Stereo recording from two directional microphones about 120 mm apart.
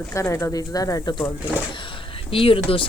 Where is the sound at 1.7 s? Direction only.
45° left (ahead or behind).